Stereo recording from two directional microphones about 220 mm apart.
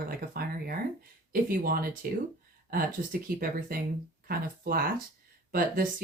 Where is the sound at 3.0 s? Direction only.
40° right (ahead or behind).